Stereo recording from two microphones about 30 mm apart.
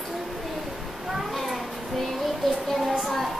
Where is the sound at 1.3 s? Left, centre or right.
Centre.